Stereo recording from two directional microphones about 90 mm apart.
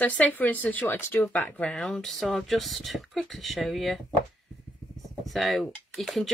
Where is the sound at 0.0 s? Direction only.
15° left (ahead or behind); by 4.0 s centre (ahead or behind).